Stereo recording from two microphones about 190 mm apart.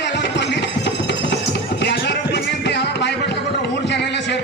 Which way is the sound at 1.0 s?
65° left (ahead or behind).